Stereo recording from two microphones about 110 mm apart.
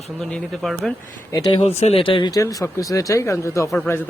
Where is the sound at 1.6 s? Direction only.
80° left.